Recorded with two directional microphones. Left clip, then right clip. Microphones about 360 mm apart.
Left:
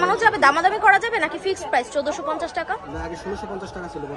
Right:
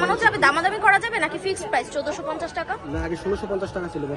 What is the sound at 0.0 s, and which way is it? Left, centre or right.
A woman's voice, left.